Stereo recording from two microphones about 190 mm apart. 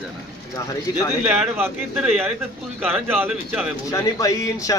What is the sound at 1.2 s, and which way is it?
Speech, 10° right (ahead or behind).